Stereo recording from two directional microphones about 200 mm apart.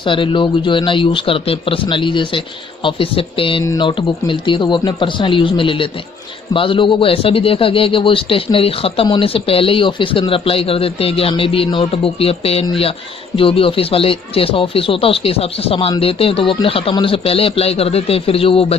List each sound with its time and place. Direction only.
0.0 s a man's voice: 25° left (ahead or behind)